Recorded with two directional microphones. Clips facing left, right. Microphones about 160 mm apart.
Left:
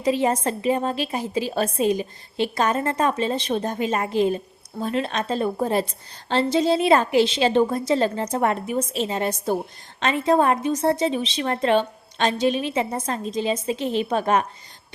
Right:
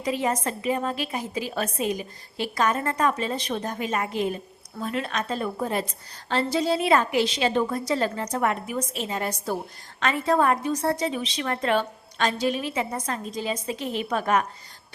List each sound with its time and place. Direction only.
0.0 s a woman's voice: 30° left (ahead or behind)